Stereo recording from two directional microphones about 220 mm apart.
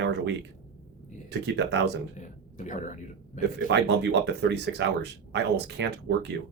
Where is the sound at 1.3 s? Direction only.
50° right (ahead or behind).